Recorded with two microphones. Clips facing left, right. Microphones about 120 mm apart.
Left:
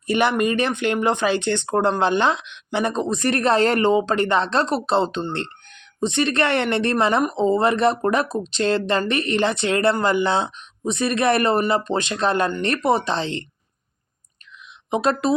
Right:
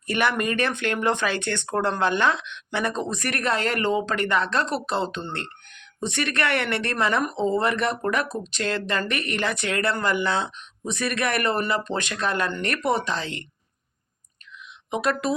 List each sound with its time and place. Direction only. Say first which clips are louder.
0.1 s speech: left 5 dB; 20° left (ahead or behind)
14.8 s speech: left 4 dB; 25° left (ahead or behind)